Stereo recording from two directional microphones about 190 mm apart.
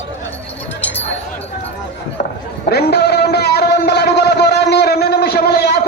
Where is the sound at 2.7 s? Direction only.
60° left (ahead or behind).